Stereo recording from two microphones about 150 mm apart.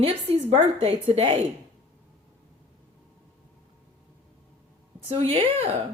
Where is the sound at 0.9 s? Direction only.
45° right (ahead or behind).